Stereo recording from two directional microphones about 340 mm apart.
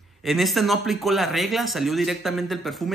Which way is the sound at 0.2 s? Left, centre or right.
Centre.